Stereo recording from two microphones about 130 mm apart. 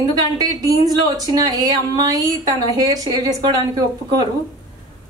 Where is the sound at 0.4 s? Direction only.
30° right (ahead or behind).